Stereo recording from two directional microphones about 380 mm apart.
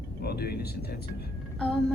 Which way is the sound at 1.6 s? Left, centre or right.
Centre.